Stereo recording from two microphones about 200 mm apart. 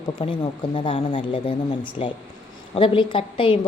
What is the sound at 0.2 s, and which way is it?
A woman's voice, 25° left (ahead or behind).